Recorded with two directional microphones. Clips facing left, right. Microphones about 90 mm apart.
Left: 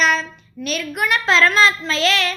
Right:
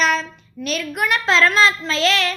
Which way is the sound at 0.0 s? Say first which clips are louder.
Left 1 dB; 40° right (ahead or behind).